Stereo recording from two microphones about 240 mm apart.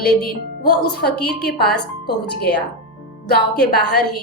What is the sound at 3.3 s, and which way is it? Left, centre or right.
Speech, left.